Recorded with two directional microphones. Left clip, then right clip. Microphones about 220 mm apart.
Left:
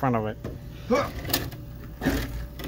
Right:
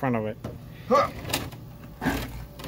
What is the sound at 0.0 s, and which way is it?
Speech, 5° right (ahead or behind).